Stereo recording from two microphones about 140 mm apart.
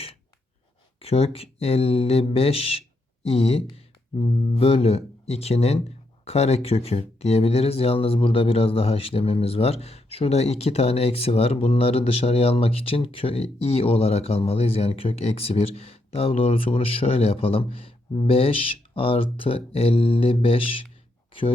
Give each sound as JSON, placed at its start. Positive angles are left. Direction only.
{"t": 0.9, "sound": "speech", "side_deg": 45}